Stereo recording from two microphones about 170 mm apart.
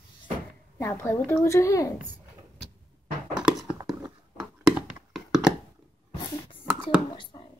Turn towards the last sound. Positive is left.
turn(degrees=30)  # may be behind; listen again after turning